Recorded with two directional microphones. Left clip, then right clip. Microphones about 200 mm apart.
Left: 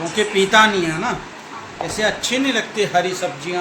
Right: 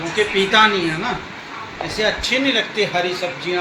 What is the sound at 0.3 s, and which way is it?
Speech, 65° left (ahead or behind).